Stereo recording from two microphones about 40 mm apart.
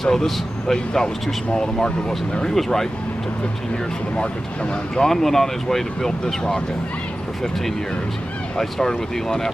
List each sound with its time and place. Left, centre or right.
0.0 s speech: centre
4.9 s speech: centre
8.5 s speech: centre